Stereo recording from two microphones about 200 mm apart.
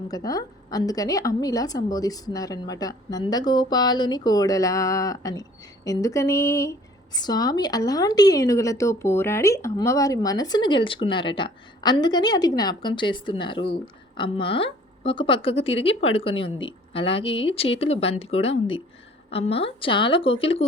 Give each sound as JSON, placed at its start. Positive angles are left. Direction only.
{"t": 0.1, "sound": "a woman's voice", "side_deg": 20}